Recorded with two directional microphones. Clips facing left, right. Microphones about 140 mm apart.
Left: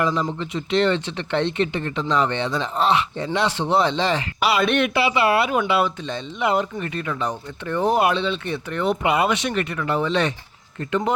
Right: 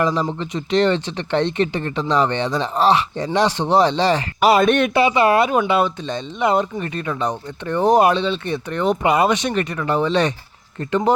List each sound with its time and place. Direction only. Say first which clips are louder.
0.0 s speech: right 2 dB; 35° right (ahead or behind)